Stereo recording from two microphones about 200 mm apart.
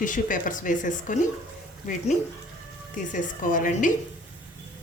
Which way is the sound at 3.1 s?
40° left (ahead or behind).